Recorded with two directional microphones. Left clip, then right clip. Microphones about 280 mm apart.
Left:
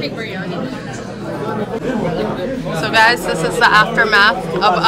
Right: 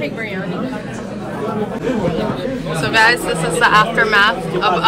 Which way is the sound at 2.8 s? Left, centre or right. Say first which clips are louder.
Left 1 dB; centre.